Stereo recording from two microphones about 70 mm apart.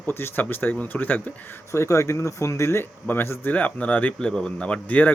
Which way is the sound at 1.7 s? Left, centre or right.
Left.